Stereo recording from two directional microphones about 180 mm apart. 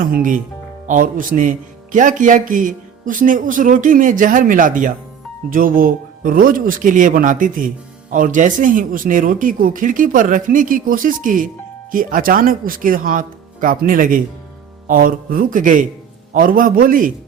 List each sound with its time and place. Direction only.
0.0 s speech: 50° right (ahead or behind)